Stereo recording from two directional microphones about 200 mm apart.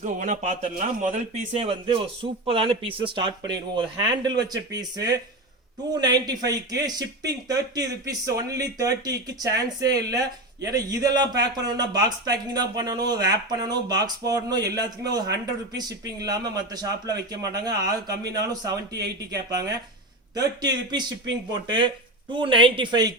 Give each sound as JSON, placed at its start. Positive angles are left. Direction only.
{"t": 0.0, "sound": "a man's voice", "side_deg": -40}
{"t": 7.9, "sound": "speech", "side_deg": -15}